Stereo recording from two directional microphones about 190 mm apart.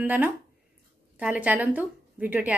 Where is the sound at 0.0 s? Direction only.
10° right (ahead or behind).